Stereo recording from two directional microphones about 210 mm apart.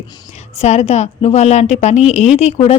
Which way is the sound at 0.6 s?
30° left (ahead or behind).